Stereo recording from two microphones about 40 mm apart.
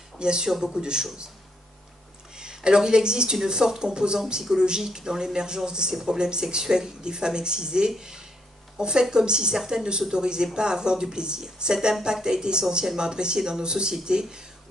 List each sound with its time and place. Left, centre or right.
0.2 s speech: right
2.3 s speech: centre
8.0 s a sound: centre
8.7 s speech: centre